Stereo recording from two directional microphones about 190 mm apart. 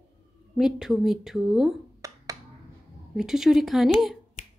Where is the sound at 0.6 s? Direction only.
Centre (ahead or behind).